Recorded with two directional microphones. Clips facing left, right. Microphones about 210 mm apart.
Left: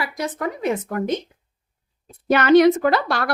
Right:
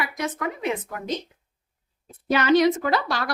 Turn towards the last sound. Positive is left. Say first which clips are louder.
# left 5 dB
turn(degrees=60)  # may be behind; listen again after turning